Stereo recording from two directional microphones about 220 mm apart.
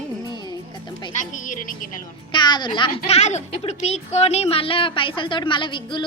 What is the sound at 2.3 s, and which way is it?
Speech, 20° left (ahead or behind).